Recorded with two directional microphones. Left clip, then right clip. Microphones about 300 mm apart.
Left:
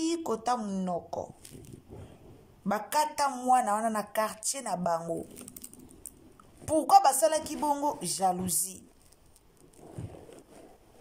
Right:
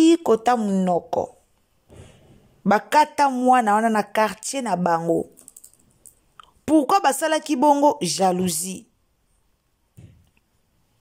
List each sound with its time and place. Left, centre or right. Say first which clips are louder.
0.0 s speech: right 14 dB; right
2.6 s speech: right 11 dB; right
6.6 s speech: right 4 dB; right